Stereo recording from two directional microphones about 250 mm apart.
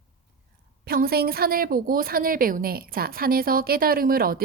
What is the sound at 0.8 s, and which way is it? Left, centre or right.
A woman's voice, right.